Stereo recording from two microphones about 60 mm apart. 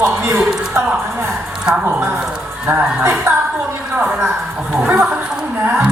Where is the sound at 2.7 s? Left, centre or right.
Right.